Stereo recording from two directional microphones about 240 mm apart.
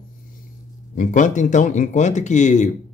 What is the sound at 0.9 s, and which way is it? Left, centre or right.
Speech, left.